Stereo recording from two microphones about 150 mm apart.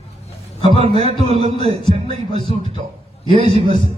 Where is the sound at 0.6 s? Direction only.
40° right (ahead or behind).